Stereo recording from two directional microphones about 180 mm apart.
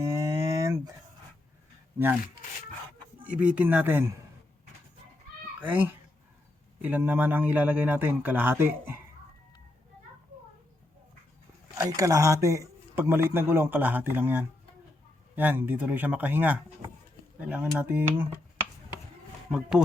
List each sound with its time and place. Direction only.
0.0 s a sound: 15° right (ahead or behind)
3.2 s speech: 5° right (ahead or behind)
5.5 s speech: 10° right (ahead or behind)
11.8 s speech: 15° right (ahead or behind)
19.5 s speech: 5° right (ahead or behind)